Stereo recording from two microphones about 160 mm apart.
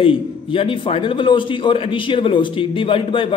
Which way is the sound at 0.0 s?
35° left (ahead or behind).